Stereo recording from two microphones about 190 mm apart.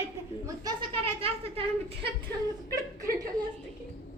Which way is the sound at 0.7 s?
30° right (ahead or behind).